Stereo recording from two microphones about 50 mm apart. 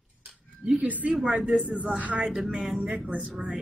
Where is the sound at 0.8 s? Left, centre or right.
Right.